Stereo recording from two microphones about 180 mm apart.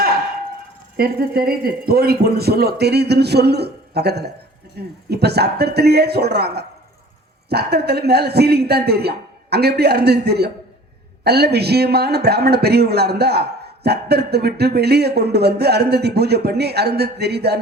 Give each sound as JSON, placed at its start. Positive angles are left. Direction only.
{"t": 0.9, "sound": "a man's voice", "side_deg": -60}